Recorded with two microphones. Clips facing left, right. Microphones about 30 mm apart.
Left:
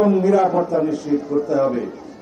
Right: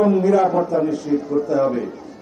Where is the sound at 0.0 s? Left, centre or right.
Centre.